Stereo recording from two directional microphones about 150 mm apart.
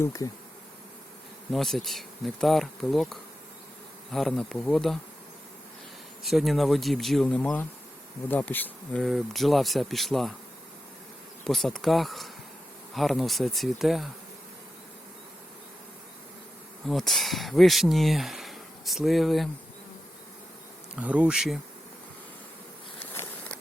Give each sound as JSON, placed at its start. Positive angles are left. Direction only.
{"t": 0.0, "sound": "bee", "side_deg": 20}
{"t": 1.5, "sound": "speech", "side_deg": 0}
{"t": 6.2, "sound": "speech", "side_deg": 0}
{"t": 11.4, "sound": "speech", "side_deg": 0}
{"t": 16.8, "sound": "speech", "side_deg": 0}
{"t": 20.9, "sound": "speech", "side_deg": -10}
{"t": 23.0, "sound": "a sound", "side_deg": 15}